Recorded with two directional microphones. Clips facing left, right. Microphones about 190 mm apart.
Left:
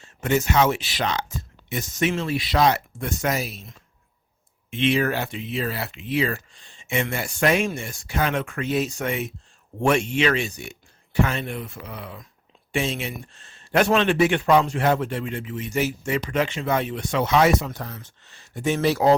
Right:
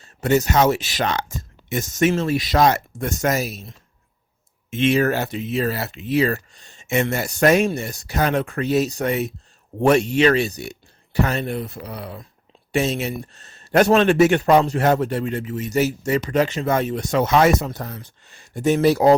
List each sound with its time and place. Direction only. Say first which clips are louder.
0.0 s speech: right 4 dB; 40° right (ahead or behind)